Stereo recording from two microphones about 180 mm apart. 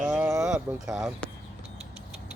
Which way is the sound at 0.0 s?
5° right (ahead or behind).